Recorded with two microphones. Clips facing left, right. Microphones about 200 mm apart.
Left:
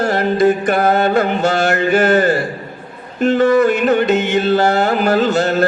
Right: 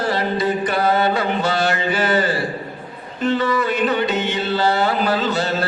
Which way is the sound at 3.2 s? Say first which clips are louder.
Left 7 dB; 45° left (ahead or behind).